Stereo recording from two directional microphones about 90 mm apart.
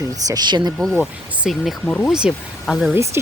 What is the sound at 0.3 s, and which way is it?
Speech, 50° right (ahead or behind).